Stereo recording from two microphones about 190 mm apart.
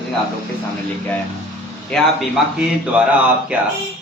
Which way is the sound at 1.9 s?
Centre (ahead or behind).